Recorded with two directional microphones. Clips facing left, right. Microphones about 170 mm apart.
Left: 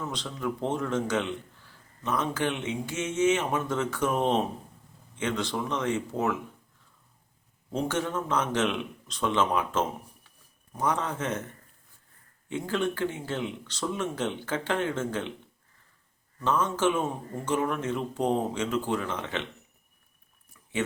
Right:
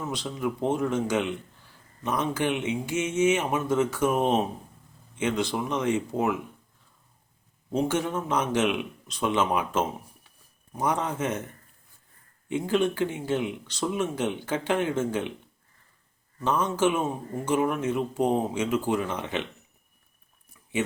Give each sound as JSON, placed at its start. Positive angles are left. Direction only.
{"t": 0.1, "sound": "speech", "side_deg": -10}
{"t": 7.7, "sound": "speech", "side_deg": -10}
{"t": 12.5, "sound": "speech", "side_deg": -15}
{"t": 16.4, "sound": "speech", "side_deg": -15}